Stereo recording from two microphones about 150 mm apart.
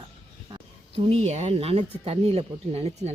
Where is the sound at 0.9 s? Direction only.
40° right (ahead or behind).